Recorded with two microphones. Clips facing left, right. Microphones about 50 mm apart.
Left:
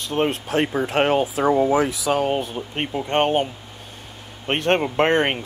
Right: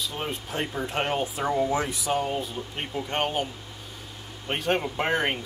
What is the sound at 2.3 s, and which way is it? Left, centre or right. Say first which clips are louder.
Speech: left 6 dB; left.